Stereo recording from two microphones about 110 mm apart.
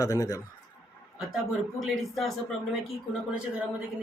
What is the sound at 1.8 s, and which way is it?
Speech, centre (ahead or behind).